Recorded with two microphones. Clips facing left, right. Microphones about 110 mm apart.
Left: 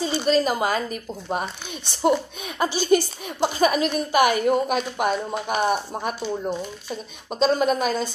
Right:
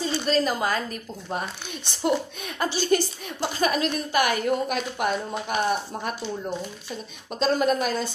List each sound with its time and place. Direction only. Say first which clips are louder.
0.0 s a woman's voice: left 3 dB; 10° left (ahead or behind)
7.3 s a woman's voice: left 2 dB; centre (ahead or behind)